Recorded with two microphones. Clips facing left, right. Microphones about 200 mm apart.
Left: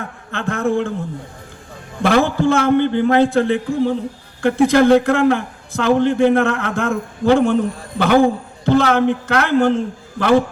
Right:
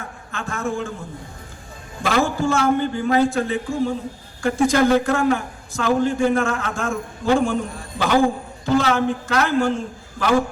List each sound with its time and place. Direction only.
0.0 s a man's voice: 60° left (ahead or behind)
2.0 s a man's voice: 60° left (ahead or behind)